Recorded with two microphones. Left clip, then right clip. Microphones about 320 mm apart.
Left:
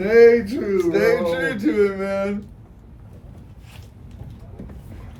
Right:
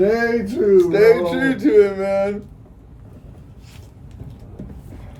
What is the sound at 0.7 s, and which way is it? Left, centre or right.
Speech, right.